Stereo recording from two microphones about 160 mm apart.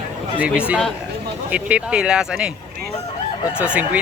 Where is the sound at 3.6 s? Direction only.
10° right (ahead or behind).